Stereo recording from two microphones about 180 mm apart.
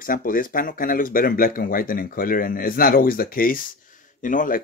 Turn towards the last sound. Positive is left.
turn(degrees=50)  # may be behind; listen again after turning